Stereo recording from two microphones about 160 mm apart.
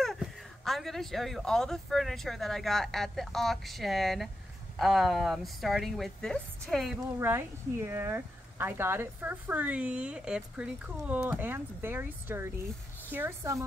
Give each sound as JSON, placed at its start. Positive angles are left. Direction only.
{"t": 0.0, "sound": "speech", "side_deg": 0}
{"t": 7.2, "sound": "speech", "side_deg": -15}